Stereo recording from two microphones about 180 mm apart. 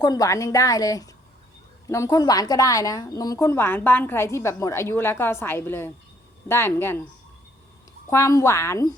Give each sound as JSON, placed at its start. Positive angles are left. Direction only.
{"t": 0.0, "sound": "a woman's voice", "side_deg": 20}
{"t": 8.1, "sound": "a woman's voice", "side_deg": 15}